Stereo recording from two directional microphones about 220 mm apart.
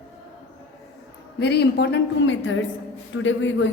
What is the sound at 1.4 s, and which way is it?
A woman's voice, 50° left (ahead or behind).